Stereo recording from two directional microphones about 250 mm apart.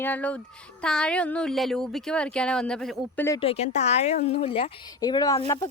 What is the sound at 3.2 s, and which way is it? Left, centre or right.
A woman's voice, centre.